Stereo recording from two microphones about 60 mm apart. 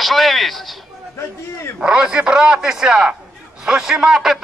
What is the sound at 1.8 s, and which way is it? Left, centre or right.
A man's voice, centre.